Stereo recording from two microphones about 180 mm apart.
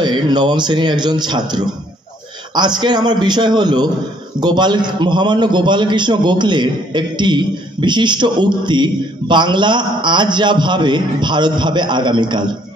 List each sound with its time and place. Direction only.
0.0 s a man's voice: 25° right (ahead or behind)